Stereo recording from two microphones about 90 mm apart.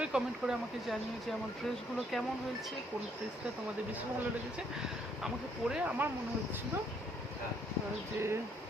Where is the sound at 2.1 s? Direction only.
Centre (ahead or behind).